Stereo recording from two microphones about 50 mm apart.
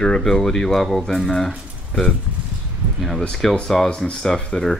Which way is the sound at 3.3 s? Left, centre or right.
Centre.